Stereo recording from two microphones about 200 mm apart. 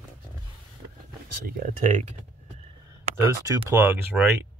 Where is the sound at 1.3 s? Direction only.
45° right (ahead or behind).